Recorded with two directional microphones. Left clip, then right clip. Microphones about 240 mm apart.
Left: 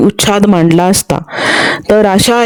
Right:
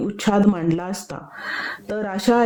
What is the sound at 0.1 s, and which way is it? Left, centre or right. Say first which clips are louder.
Speech: left 10 dB; left.